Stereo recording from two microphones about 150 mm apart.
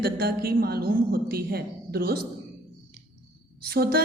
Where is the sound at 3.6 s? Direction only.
90° right.